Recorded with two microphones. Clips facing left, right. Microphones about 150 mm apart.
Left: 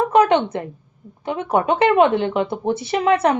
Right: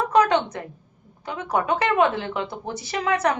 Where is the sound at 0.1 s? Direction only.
25° left (ahead or behind).